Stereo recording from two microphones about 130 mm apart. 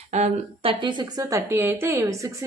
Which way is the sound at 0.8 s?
35° right (ahead or behind).